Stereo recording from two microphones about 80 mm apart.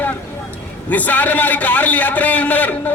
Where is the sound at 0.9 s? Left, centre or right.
Centre.